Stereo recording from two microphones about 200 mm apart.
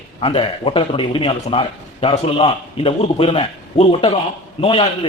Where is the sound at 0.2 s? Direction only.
25° left (ahead or behind).